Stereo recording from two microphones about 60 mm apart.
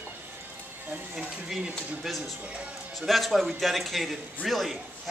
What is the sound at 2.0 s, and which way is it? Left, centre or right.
Speech, centre.